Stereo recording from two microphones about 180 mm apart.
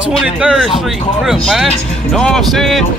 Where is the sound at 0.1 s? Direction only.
5° right (ahead or behind).